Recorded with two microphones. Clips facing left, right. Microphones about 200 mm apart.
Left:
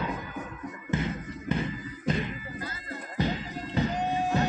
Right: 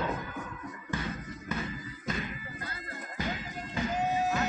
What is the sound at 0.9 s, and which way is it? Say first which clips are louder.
Music: left 6 dB; 25° left (ahead or behind).